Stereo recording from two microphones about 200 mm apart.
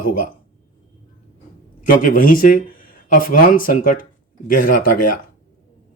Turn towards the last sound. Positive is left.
turn(degrees=45)  # may be behind; listen again after turning